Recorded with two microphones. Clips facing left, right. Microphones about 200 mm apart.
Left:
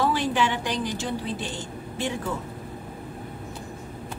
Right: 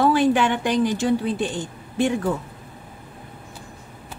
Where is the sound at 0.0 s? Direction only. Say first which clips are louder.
Right 6 dB; 55° right (ahead or behind).